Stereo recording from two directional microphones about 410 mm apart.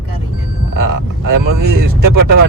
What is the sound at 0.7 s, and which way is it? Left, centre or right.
Speech, right.